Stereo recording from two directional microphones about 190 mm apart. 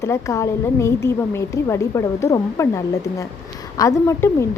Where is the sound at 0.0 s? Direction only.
15° left (ahead or behind).